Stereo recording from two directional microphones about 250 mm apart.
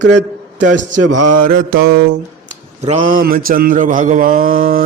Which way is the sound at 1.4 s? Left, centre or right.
Right.